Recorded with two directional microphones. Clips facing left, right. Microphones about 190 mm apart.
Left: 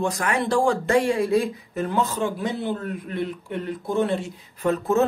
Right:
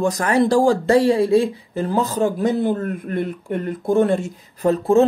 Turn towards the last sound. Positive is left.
turn(degrees=-35)  # may be behind; listen again after turning